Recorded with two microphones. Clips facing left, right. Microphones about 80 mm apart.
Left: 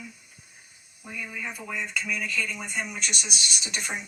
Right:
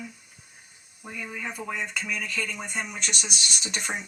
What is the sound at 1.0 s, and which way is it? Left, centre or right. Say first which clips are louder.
Speech: right 1 dB; right.